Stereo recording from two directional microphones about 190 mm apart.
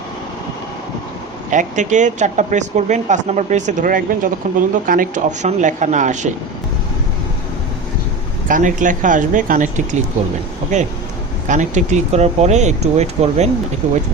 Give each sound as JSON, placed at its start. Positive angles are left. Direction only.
{"t": 1.5, "sound": "speech", "side_deg": -40}
{"t": 8.4, "sound": "speech", "side_deg": -45}